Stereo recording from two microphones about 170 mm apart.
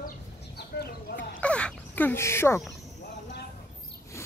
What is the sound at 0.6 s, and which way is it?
Chicken, 75° left (ahead or behind).